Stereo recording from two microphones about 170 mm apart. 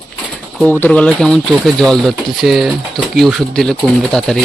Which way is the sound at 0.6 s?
10° left (ahead or behind).